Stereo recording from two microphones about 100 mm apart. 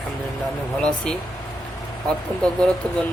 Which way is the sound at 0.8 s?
10° left (ahead or behind).